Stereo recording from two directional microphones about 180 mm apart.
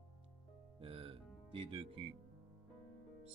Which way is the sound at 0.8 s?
30° right (ahead or behind).